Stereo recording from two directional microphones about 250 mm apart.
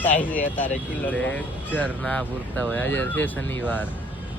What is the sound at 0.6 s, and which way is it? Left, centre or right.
Speech, centre.